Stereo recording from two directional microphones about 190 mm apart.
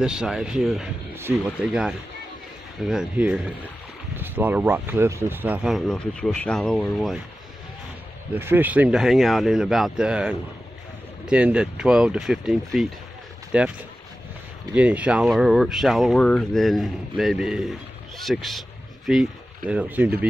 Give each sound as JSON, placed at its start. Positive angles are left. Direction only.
{"t": 0.0, "sound": "speech", "side_deg": -5}
{"t": 8.4, "sound": "speech", "side_deg": -10}